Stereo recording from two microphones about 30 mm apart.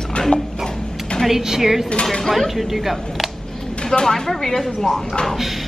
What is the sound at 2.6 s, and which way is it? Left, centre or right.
Speech, centre.